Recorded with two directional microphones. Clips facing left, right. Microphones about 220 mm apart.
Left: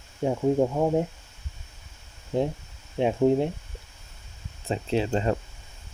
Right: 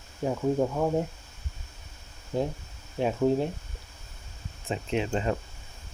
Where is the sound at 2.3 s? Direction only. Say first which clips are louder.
Left 3 dB; 25° left (ahead or behind).